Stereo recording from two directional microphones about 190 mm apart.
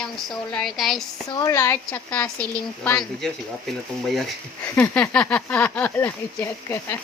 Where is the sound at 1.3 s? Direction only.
20° left (ahead or behind).